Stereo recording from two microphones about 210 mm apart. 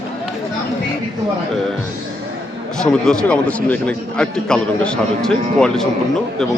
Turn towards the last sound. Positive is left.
turn(degrees=5)  # may be behind; listen again after turning